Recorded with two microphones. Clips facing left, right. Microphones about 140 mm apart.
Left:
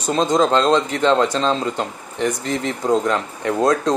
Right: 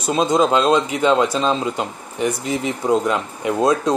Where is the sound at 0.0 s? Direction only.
10° right (ahead or behind).